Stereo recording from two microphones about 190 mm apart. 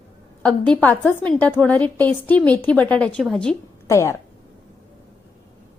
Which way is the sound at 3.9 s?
15° left (ahead or behind).